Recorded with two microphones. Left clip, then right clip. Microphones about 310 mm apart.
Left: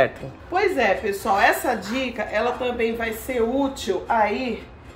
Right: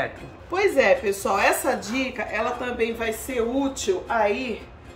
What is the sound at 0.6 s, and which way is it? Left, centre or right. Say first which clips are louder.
Speech: right 1 dB; right.